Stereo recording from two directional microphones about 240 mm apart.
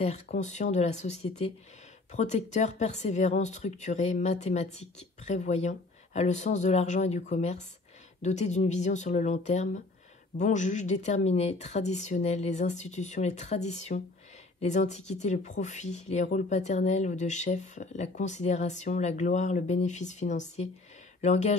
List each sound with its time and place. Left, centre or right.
0.3 s speech: left